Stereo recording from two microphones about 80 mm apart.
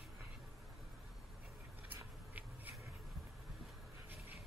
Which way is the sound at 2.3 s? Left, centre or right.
Centre.